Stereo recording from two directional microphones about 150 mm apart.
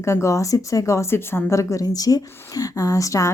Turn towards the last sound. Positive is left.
turn(degrees=20)  # may be behind; listen again after turning